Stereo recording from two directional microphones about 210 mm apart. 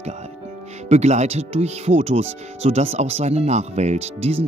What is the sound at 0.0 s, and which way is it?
Speech, 30° right (ahead or behind).